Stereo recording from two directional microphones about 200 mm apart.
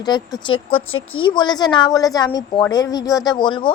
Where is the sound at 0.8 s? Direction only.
90° left.